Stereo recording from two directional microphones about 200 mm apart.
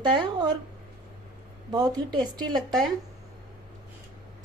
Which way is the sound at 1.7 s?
20° right (ahead or behind).